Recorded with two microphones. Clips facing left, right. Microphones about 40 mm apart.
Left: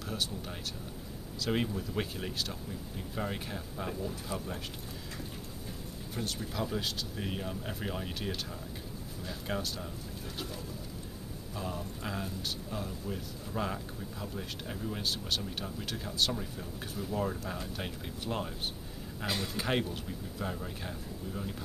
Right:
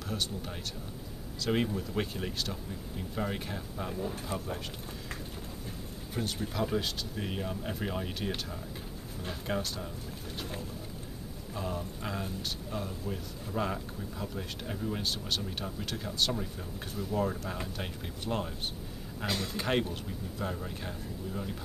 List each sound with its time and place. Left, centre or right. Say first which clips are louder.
0.0 s speech: right 1 dB; centre
4.3 s speech: even; right
6.1 s speech: right 3 dB; centre
9.5 s speech: right 2 dB; centre
11.5 s speech: right 2 dB; centre